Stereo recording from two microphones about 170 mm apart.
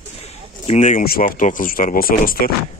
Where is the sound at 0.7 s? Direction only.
45° left (ahead or behind).